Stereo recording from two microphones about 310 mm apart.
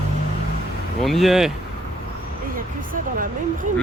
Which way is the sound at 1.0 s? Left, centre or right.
Centre.